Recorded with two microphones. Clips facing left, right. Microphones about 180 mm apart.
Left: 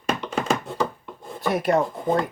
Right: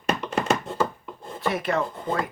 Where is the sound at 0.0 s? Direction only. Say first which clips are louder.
Even; centre (ahead or behind).